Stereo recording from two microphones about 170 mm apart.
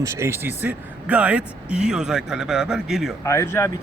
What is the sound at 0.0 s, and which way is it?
Speech, 15° right (ahead or behind).